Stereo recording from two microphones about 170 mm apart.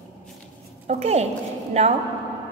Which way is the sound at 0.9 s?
40° right (ahead or behind).